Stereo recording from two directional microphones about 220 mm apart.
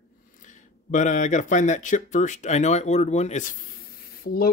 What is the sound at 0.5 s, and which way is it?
Speech, 35° left (ahead or behind).